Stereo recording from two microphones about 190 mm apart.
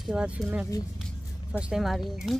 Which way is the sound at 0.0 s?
5° right (ahead or behind).